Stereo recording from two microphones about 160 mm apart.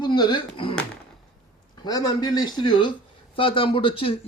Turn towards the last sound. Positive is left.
turn(degrees=35)  # may be behind; listen again after turning